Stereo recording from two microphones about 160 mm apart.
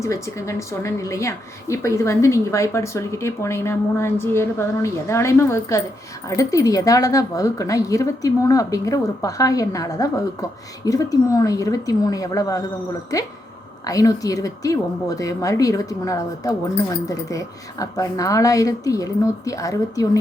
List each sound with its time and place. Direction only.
0.0 s a woman's voice: 20° left (ahead or behind)